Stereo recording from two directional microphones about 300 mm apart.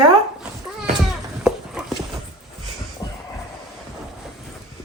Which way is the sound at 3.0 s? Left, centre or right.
Centre.